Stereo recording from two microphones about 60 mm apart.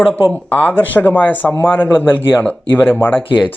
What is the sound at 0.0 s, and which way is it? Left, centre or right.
Speech, left.